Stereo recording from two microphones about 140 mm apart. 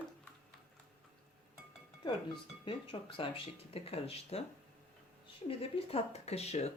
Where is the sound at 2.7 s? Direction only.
40° left (ahead or behind).